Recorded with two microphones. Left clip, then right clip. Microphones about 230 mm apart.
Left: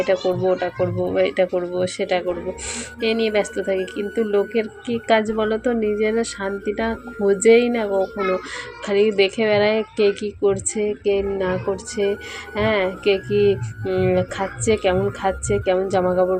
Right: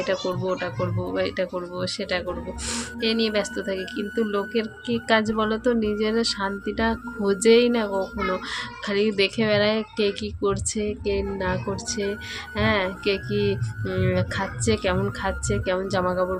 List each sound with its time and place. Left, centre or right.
0.0 s speech: centre